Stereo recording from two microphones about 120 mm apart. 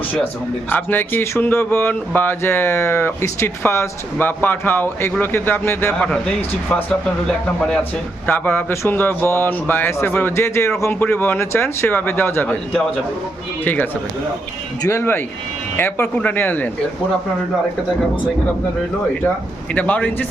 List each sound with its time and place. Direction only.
0.7 s speech: 15° left (ahead or behind)
7.3 s a man's voice: 5° left (ahead or behind)
8.3 s speech: 15° left (ahead or behind)
14.8 s speech: 20° left (ahead or behind)
19.7 s speech: 10° left (ahead or behind)